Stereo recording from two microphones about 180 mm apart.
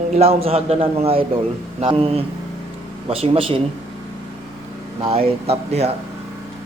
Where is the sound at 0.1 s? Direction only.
35° right (ahead or behind).